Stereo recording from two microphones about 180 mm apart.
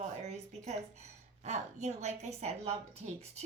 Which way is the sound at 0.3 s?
35° right (ahead or behind).